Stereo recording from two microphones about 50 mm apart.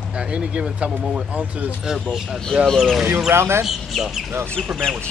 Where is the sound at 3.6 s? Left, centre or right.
Centre.